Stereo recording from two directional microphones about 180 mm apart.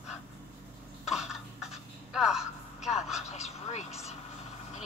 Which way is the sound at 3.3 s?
40° left (ahead or behind).